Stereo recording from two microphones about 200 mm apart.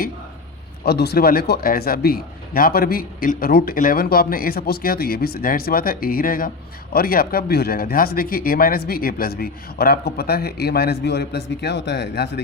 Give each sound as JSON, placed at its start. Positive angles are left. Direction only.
{"t": 0.9, "sound": "speech", "side_deg": 55}